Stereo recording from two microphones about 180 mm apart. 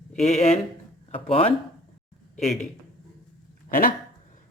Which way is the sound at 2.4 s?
40° left (ahead or behind).